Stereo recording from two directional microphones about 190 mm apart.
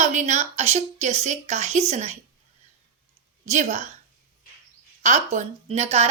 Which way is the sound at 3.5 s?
40° right (ahead or behind).